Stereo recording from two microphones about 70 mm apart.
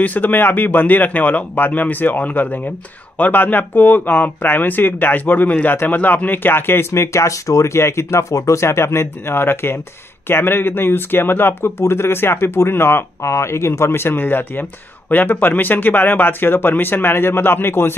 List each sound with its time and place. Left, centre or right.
0.0 s speech: left